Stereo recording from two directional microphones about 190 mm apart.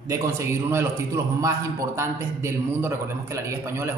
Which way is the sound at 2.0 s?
15° right (ahead or behind).